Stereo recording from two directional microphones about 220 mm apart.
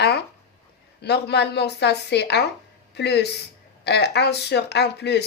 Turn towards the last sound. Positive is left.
turn(degrees=50)  # may be behind; listen again after turning